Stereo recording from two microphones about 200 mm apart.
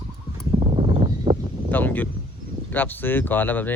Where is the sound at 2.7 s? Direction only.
10° left (ahead or behind).